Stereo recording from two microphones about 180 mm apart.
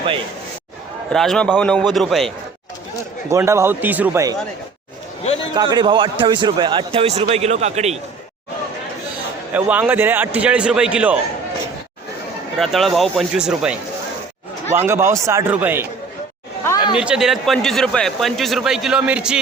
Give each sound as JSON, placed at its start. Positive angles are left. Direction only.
{"t": 1.1, "sound": "a man's voice", "side_deg": 0}
{"t": 3.2, "sound": "a man's voice", "side_deg": -15}
{"t": 5.5, "sound": "a man's voice", "side_deg": -25}
{"t": 9.5, "sound": "a man's voice", "side_deg": -10}
{"t": 12.5, "sound": "a man's voice", "side_deg": 0}
{"t": 14.8, "sound": "a man's voice", "side_deg": -15}
{"t": 16.9, "sound": "a man's voice", "side_deg": -5}